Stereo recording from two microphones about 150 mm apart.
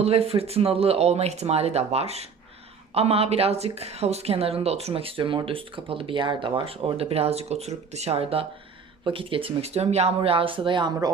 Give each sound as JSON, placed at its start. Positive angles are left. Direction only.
{"t": 0.0, "sound": "speech", "side_deg": -40}